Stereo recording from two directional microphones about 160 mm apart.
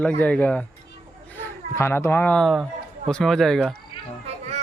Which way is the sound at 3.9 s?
35° left (ahead or behind).